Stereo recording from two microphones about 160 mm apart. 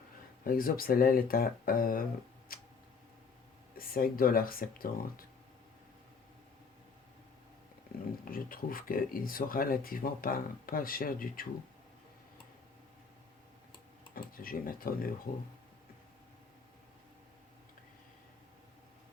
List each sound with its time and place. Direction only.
0.4 s speech: 65° left (ahead or behind)
2.5 s tick-tock: 65° left (ahead or behind)
3.8 s speech: 65° left (ahead or behind)
8.2 s speech: 60° left (ahead or behind)
14.2 s speech: 65° left (ahead or behind)